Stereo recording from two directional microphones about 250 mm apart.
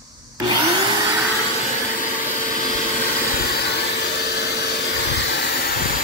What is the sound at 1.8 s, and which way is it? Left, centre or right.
Vacuum cleaner, left.